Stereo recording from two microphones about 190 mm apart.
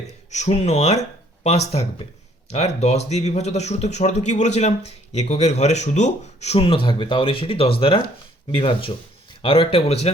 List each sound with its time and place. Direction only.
0.3 s speech: 35° left (ahead or behind)